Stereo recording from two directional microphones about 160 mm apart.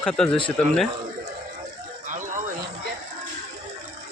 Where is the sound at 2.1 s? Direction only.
55° right (ahead or behind).